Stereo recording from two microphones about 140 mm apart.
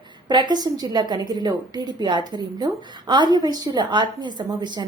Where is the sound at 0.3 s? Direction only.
35° right (ahead or behind).